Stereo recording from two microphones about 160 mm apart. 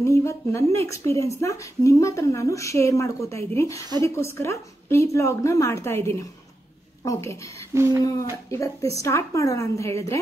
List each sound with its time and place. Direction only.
0.0 s a woman's voice: 20° left (ahead or behind)
7.7 s a sound: 15° right (ahead or behind)
8.5 s a woman's voice: 20° left (ahead or behind)